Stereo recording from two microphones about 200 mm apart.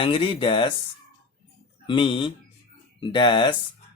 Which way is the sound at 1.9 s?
25° left (ahead or behind).